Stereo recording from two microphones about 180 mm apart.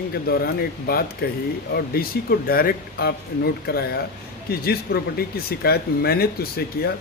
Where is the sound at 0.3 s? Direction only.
55° left (ahead or behind).